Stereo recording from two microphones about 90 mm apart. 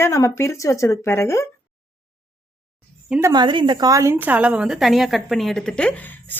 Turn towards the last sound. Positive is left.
turn(degrees=20)  # may be behind; listen again after turning